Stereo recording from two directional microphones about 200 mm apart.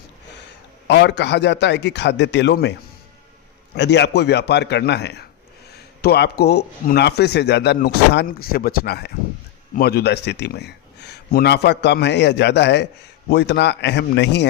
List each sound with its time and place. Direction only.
0.9 s speech: 60° left (ahead or behind)
3.8 s speech: 60° left (ahead or behind)